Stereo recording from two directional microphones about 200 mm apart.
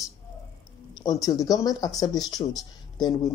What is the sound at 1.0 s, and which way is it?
Speech, 15° left (ahead or behind).